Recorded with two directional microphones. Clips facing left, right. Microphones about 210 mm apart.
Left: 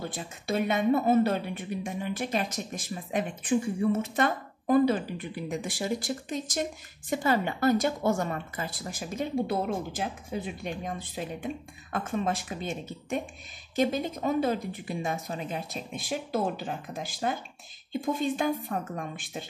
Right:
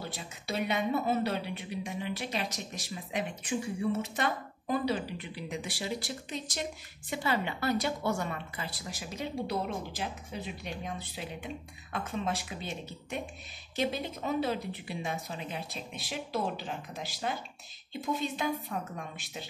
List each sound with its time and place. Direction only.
0.0 s a woman's voice: 50° left (ahead or behind)